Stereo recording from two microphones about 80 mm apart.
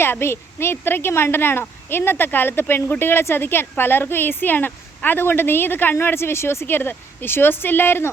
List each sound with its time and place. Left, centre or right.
0.0 s a woman's voice: left